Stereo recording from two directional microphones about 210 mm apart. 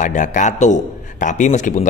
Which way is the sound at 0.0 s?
35° left (ahead or behind).